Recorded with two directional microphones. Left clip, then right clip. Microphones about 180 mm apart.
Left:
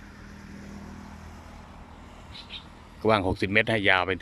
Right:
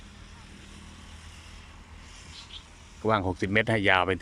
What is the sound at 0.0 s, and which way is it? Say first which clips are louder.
Vehicle: left 3 dB; 35° left (ahead or behind).